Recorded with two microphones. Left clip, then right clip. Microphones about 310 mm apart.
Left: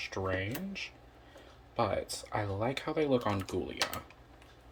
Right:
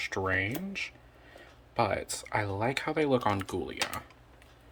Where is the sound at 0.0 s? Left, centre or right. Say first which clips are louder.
Right 5 dB; centre.